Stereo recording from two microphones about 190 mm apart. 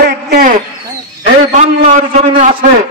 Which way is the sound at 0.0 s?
50° right (ahead or behind).